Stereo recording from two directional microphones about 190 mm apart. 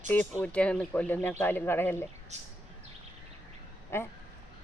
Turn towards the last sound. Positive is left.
turn(degrees=10)  # may be behind; listen again after turning